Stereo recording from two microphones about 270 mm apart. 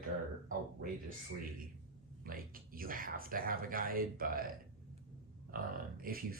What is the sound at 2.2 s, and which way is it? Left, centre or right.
Speech, right.